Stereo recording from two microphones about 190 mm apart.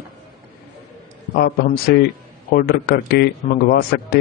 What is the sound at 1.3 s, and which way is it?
A man's voice, 55° left (ahead or behind).